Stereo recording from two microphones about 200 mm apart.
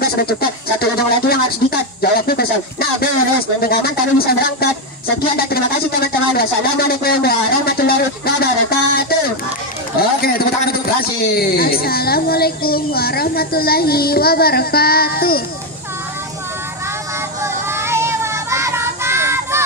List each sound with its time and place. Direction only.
0.0 s a man's voice: 50° left (ahead or behind)
17.4 s child singing: 15° right (ahead or behind)